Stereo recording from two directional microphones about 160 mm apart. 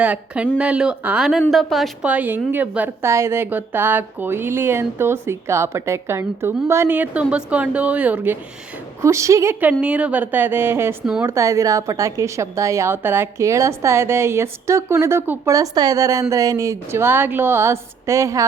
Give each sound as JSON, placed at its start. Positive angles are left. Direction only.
{"t": 0.0, "sound": "a woman's voice", "side_deg": -10}